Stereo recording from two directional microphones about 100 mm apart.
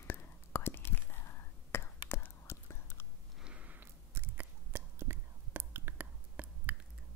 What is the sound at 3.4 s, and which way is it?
Biting, 10° right (ahead or behind).